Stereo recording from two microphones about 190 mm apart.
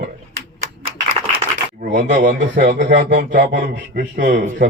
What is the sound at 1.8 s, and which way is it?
Speech, 45° right (ahead or behind).